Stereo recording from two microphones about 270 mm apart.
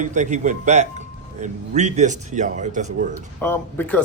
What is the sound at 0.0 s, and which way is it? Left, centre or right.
A man's voice, right.